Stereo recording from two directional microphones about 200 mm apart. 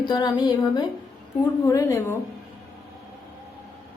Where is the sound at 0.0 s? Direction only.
20° left (ahead or behind).